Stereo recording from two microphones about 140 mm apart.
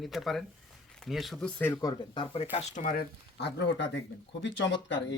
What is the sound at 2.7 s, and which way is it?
Speech, 75° left (ahead or behind).